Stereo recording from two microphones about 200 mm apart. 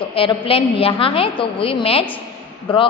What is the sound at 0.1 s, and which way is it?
A woman's voice, 25° left (ahead or behind).